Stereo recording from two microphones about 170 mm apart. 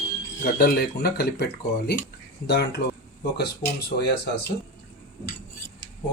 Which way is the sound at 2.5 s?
75° left (ahead or behind).